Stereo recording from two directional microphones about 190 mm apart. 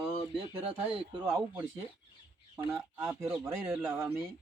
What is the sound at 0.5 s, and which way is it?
Speech, 30° right (ahead or behind).